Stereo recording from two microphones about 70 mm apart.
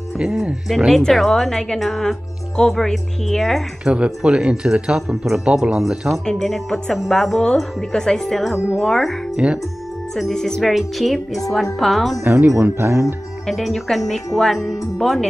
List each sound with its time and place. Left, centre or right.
0.2 s a woman's voice: centre
3.8 s a woman's voice: centre
9.4 s speech: centre
10.1 s a woman's voice: centre
12.5 s speech: right
13.5 s a woman's voice: centre